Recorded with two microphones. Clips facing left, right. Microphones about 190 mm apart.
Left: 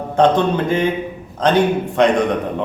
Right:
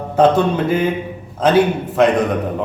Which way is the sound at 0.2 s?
5° right (ahead or behind).